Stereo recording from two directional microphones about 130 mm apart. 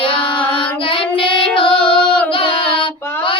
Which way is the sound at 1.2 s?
40° left (ahead or behind).